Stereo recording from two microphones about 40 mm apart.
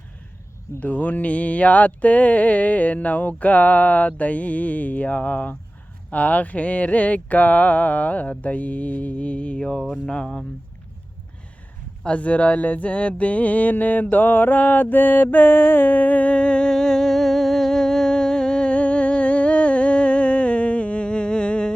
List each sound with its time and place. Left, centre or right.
0.8 s mantra: left
9.6 s speech: centre
12.0 s a sound: left
16.3 s speech: left
16.7 s music: centre